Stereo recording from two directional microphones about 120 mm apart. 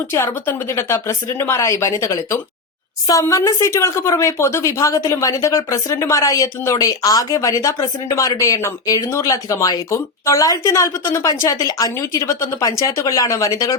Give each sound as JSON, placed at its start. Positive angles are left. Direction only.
{"t": 0.1, "sound": "a woman's voice", "side_deg": 20}